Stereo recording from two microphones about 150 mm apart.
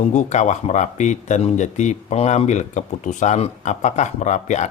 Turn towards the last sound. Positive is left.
turn(degrees=50)  # may be behind; listen again after turning